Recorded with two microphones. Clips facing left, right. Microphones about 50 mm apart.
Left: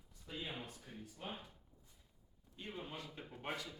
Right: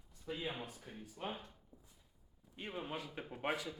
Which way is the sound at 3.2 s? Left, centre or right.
Right.